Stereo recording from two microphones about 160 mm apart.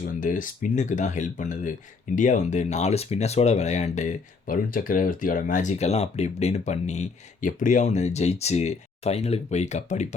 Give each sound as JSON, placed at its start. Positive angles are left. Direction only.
{"t": 0.0, "sound": "speech", "side_deg": 55}